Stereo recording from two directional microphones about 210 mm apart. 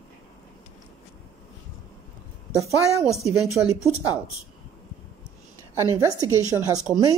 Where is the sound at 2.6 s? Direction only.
15° right (ahead or behind).